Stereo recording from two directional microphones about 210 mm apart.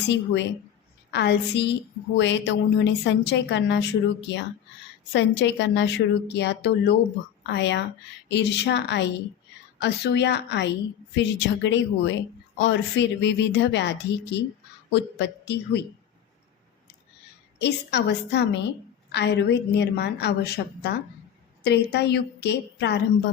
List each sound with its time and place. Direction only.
1.1 s a woman's voice: 55° left (ahead or behind)
17.6 s a woman's voice: 55° left (ahead or behind)